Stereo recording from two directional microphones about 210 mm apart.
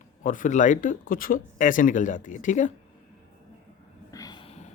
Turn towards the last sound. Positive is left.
turn(degrees=20)  # may be behind; listen again after turning